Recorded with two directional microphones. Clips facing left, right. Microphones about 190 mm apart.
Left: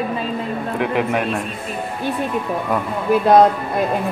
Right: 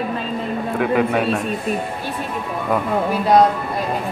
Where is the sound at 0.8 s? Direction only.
Centre (ahead or behind).